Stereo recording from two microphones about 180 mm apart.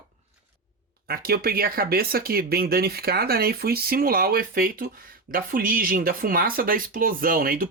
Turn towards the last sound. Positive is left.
turn(degrees=-55)  # may be behind; listen again after turning